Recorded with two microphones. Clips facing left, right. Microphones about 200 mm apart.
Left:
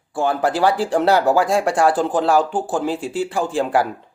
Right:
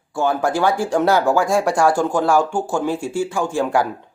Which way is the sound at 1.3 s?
Centre (ahead or behind).